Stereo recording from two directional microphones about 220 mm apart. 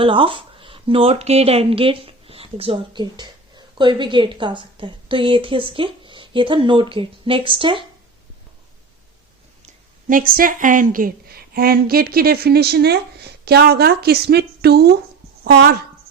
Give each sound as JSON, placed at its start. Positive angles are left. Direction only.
{"t": 0.0, "sound": "speech", "side_deg": -25}
{"t": 9.6, "sound": "a woman's voice", "side_deg": -40}